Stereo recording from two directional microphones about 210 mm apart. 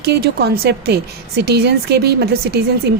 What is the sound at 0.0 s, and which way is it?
Speech, 50° right (ahead or behind).